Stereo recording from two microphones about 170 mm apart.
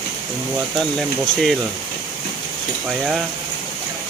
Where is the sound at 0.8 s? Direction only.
Centre (ahead or behind).